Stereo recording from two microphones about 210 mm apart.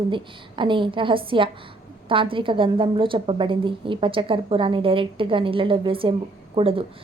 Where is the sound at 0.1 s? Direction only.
25° right (ahead or behind).